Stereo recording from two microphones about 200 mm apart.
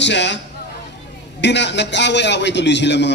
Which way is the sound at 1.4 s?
60° left (ahead or behind).